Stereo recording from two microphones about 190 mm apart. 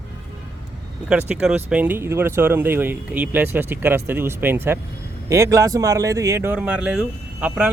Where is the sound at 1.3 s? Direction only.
5° right (ahead or behind).